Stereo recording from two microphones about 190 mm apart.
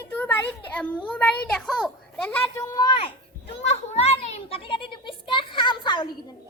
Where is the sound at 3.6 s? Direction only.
35° left (ahead or behind).